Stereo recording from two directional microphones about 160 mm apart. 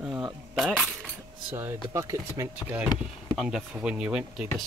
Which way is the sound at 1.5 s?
15° right (ahead or behind).